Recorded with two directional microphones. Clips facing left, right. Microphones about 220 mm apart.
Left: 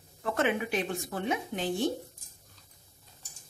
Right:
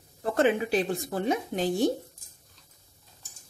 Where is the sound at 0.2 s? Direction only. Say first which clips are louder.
Right 5 dB; 35° right (ahead or behind).